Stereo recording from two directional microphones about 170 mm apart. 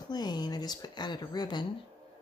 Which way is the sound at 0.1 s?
25° left (ahead or behind).